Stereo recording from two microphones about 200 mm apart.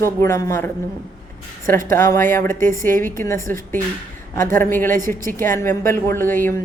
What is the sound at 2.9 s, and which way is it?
Speech, 45° right (ahead or behind).